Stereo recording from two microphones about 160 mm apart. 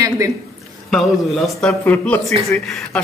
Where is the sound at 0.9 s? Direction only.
Centre (ahead or behind).